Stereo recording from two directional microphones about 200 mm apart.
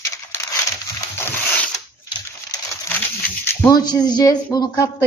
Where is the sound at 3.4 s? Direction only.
15° left (ahead or behind).